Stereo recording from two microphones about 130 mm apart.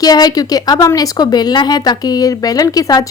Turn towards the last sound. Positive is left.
turn(degrees=25)  # may be behind; listen again after turning